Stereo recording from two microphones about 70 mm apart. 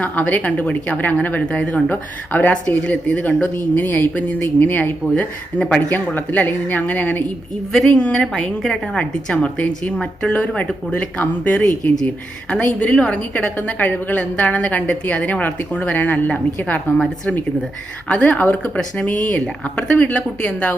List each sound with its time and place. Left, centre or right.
0.0 s a woman's voice: left
18.1 s a woman's voice: centre